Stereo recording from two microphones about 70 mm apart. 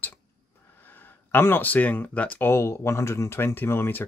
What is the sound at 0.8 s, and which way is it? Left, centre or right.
Speech, left.